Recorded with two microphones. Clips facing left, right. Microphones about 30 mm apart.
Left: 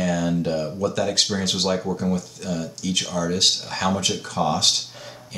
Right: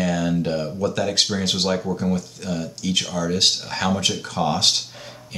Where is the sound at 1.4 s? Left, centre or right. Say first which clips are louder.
Right 1 dB; centre.